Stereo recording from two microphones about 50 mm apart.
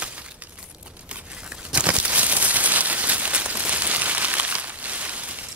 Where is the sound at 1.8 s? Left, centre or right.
Right.